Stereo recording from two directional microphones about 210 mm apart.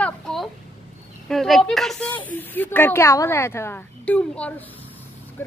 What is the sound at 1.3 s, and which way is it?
A woman's voice, centre (ahead or behind).